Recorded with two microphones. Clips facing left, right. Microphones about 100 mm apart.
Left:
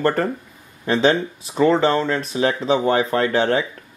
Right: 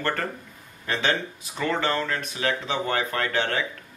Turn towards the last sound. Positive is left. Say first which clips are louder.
# left 8 dB
turn(degrees=25)  # may be behind; listen again after turning